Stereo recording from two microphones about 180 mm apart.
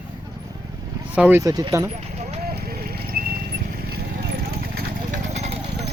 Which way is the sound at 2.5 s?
60° right (ahead or behind).